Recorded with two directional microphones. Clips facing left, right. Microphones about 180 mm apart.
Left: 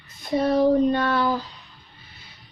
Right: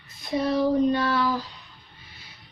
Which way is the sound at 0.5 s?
55° left (ahead or behind).